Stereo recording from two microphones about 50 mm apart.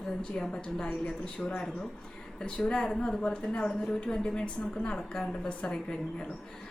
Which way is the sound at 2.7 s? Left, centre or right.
Centre.